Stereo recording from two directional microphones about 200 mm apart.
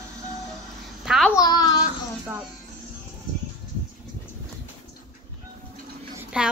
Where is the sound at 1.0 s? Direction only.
Centre (ahead or behind).